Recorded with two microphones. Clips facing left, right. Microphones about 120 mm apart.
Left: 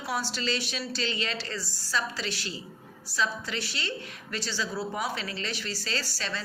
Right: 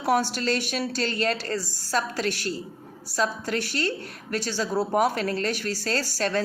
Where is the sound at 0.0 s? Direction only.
55° right (ahead or behind).